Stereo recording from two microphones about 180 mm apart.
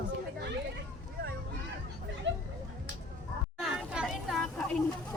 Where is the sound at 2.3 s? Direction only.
90° right.